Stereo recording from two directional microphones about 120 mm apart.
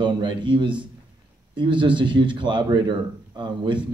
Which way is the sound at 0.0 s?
40° right (ahead or behind).